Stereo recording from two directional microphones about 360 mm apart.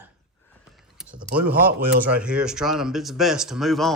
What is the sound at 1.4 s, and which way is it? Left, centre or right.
Speech, centre.